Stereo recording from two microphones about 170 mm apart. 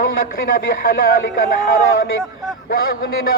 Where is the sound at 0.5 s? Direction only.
60° left (ahead or behind).